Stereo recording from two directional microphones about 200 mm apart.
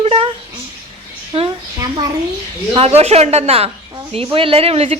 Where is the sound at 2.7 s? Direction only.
30° right (ahead or behind).